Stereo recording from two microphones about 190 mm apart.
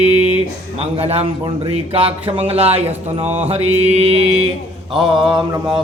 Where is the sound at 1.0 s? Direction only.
30° right (ahead or behind).